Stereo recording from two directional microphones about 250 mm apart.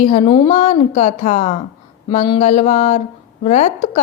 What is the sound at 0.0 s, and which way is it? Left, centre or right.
A woman's voice, left.